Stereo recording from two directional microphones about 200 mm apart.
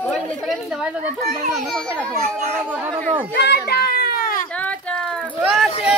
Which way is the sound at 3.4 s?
50° left (ahead or behind).